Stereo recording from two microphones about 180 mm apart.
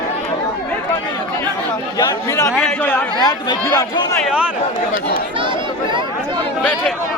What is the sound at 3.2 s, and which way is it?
Speech, 25° left (ahead or behind).